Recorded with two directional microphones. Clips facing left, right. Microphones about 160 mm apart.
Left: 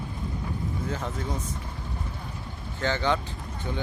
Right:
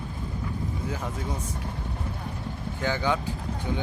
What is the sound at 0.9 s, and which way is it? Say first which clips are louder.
Speech: left 1 dB; 10° right (ahead or behind).